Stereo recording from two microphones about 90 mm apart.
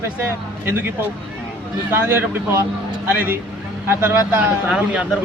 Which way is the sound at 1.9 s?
25° right (ahead or behind).